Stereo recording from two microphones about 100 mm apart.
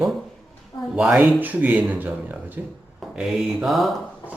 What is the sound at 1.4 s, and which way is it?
Speech, 15° right (ahead or behind).